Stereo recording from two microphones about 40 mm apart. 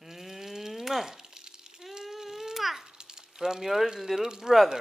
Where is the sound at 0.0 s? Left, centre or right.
Centre.